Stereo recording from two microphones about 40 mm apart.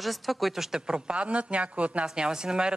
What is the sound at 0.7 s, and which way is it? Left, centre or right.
Speech, centre.